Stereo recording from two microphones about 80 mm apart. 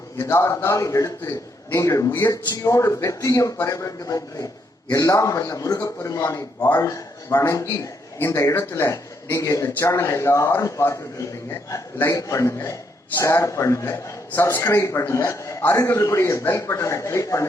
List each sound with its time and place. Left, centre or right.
0.2 s a man's voice: left
2.0 s speech: left
2.3 s a man's voice: left
9.6 s a man's voice: left
12.0 s a man's voice: left